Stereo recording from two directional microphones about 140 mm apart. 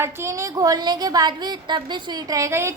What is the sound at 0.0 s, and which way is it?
A woman's voice, 20° right (ahead or behind).